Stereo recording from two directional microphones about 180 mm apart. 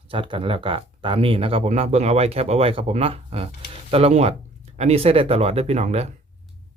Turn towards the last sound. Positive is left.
turn(degrees=-35)  # may be behind; listen again after turning